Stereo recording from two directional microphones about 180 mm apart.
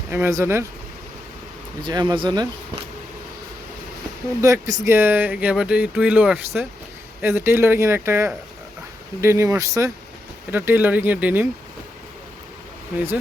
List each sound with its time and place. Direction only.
0.1 s speech: 15° right (ahead or behind)
1.8 s speech: 20° right (ahead or behind)
4.4 s speech: 15° right (ahead or behind)